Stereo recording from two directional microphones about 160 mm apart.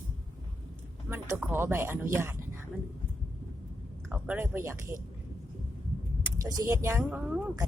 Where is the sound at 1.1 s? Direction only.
15° right (ahead or behind).